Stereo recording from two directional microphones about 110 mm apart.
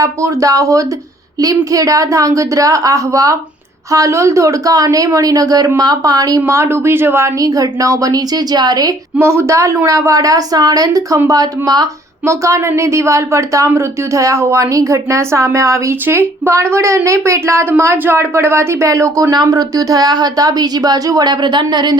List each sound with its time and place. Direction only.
0.0 s speech: 30° right (ahead or behind)
9.1 s a woman's voice: 25° right (ahead or behind); by 21.9 s 40° right (ahead or behind)